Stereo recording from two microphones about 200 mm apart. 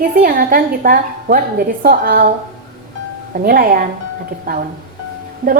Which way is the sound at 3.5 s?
45° right (ahead or behind).